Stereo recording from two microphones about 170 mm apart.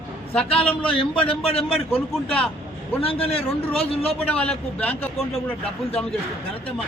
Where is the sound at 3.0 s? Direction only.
35° left (ahead or behind).